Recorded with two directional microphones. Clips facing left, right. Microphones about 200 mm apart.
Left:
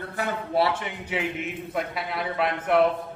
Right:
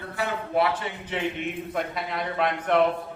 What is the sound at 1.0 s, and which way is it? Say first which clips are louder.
A man's voice: even; 5° left (ahead or behind).